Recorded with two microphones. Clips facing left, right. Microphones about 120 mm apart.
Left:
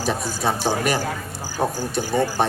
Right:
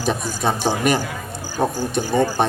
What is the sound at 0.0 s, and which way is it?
Speech, 20° right (ahead or behind).